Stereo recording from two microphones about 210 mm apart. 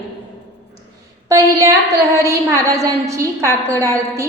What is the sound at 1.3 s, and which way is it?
A woman's voice, 15° right (ahead or behind).